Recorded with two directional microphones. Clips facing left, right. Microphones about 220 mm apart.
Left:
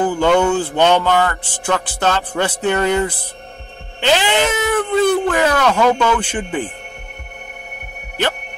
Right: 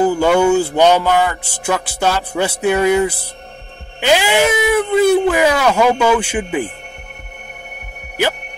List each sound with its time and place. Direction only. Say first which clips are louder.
0.0 s music: right 2 dB; 10° right (ahead or behind)